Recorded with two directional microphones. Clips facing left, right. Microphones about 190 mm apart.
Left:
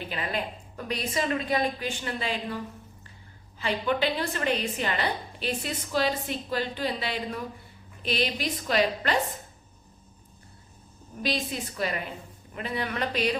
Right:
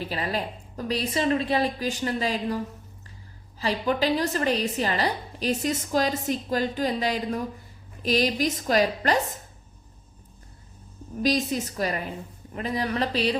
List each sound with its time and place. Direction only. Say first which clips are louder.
0.0 s a woman's voice: right 3 dB; 35° right (ahead or behind)
3.6 s a woman's voice: right 2 dB; 35° right (ahead or behind)
11.2 s a woman's voice: right 6 dB; 40° right (ahead or behind)